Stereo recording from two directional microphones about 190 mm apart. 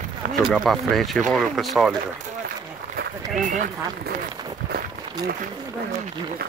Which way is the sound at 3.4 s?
45° right (ahead or behind).